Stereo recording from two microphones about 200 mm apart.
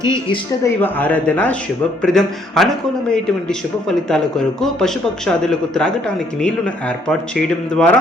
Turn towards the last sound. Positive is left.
turn(degrees=5)  # may be behind; listen again after turning